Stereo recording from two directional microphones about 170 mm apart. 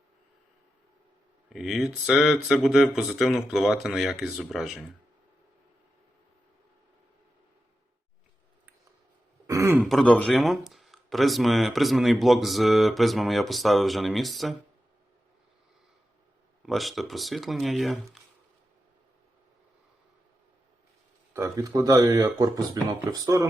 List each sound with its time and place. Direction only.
1.5 s speech: centre (ahead or behind)
9.5 s a sound: 15° right (ahead or behind)
9.8 s speech: 5° left (ahead or behind)
16.6 s speech: centre (ahead or behind)
21.3 s speech: 15° right (ahead or behind)